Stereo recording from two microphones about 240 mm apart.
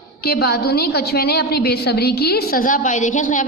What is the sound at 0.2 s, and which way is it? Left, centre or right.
A woman's voice, left.